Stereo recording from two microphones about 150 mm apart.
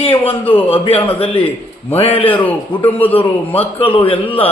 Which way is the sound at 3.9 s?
35° left (ahead or behind).